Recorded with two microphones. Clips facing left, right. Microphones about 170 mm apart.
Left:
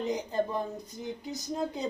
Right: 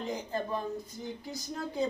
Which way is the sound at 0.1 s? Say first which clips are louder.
Left 2 dB; 20° left (ahead or behind).